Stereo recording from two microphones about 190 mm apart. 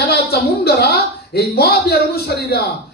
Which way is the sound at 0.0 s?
55° left (ahead or behind).